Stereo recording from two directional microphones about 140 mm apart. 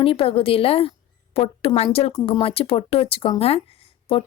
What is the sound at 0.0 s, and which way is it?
A woman's voice, 40° left (ahead or behind).